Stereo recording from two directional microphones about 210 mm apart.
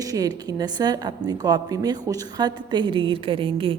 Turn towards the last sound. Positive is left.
turn(degrees=-25)  # may be behind; listen again after turning